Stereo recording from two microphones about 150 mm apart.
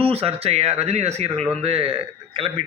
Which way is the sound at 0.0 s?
40° right (ahead or behind).